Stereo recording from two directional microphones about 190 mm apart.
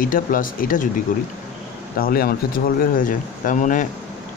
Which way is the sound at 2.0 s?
50° left (ahead or behind).